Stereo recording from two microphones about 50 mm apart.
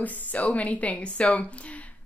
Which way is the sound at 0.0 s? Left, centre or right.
Left.